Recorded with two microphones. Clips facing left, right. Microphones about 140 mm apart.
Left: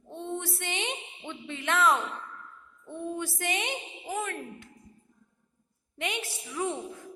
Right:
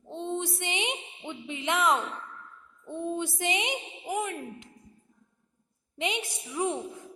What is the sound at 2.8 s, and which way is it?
A woman's voice, 20° right (ahead or behind).